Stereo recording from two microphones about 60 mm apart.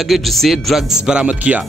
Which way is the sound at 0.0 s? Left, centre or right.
Centre.